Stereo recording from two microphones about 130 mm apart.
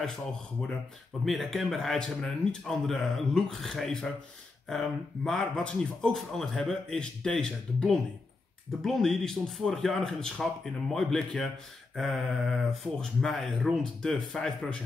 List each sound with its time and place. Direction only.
1.2 s speech: centre (ahead or behind)